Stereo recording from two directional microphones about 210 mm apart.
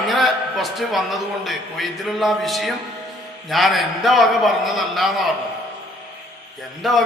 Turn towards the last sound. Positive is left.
turn(degrees=0)  # may be behind; listen again after turning